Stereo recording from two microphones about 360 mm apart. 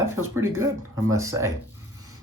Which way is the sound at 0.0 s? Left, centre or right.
Centre.